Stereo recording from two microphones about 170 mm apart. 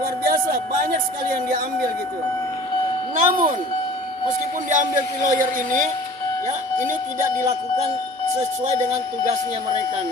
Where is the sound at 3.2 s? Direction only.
55° right (ahead or behind).